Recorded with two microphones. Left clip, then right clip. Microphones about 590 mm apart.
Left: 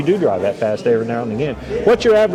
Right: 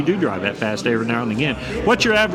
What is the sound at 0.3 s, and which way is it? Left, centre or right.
Speech, centre.